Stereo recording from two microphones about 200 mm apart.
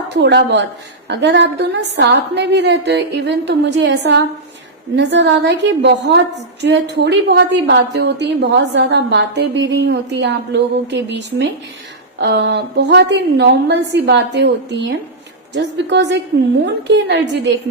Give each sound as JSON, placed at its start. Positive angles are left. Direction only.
{"t": 0.1, "sound": "a woman's voice", "side_deg": -60}